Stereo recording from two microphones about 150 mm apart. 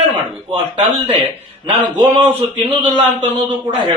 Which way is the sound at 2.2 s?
35° right (ahead or behind).